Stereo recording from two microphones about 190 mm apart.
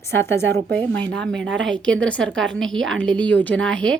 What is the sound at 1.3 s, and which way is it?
Speech, 75° right (ahead or behind).